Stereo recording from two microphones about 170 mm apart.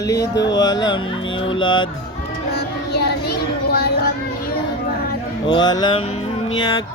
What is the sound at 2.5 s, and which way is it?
Child singing, 70° left (ahead or behind).